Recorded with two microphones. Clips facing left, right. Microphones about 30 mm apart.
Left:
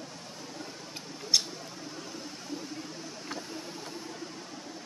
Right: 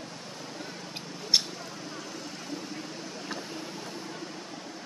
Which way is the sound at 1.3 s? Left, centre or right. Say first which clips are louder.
Right 2 dB; right.